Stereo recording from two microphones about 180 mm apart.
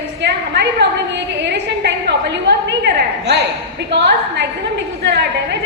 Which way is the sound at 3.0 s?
70° right (ahead or behind).